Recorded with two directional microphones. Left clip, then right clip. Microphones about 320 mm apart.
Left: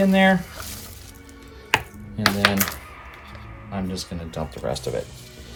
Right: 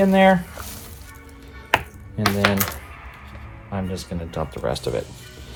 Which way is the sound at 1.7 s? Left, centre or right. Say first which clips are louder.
Right 1 dB; centre.